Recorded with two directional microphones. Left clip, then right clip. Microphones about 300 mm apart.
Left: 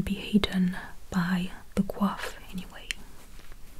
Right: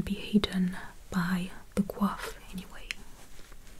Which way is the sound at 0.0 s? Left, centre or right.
Left.